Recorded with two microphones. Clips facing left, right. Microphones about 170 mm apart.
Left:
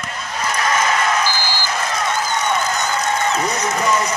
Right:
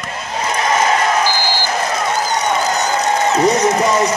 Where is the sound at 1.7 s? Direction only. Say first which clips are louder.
Right 1 dB; 40° right (ahead or behind).